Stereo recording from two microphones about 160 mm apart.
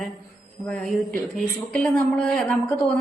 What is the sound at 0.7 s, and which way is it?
Speech, 5° left (ahead or behind).